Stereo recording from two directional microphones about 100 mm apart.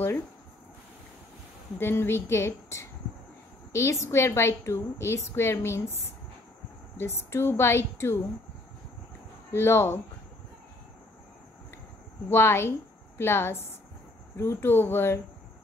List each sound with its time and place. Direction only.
1.8 s a woman's voice: 25° left (ahead or behind)
7.0 s a woman's voice: 25° left (ahead or behind)
9.5 s a woman's voice: 25° left (ahead or behind)
12.3 s a woman's voice: 25° left (ahead or behind)